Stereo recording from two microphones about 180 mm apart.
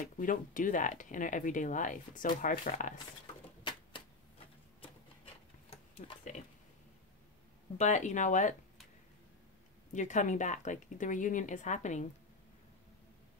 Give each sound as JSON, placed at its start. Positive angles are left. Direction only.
{"t": 0.2, "sound": "speech", "side_deg": 50}
{"t": 4.8, "sound": "sewing machine", "side_deg": 30}
{"t": 6.0, "sound": "speech", "side_deg": 45}
{"t": 7.7, "sound": "speech", "side_deg": 40}
{"t": 9.9, "sound": "speech", "side_deg": 45}